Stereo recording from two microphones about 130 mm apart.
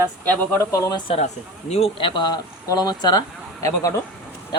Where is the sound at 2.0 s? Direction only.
35° left (ahead or behind).